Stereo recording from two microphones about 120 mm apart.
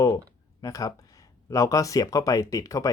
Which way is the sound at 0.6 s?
30° left (ahead or behind).